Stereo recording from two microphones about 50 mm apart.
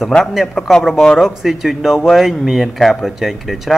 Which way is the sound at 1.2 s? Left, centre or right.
Centre.